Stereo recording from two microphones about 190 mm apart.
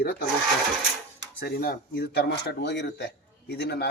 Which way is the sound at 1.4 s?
55° left (ahead or behind).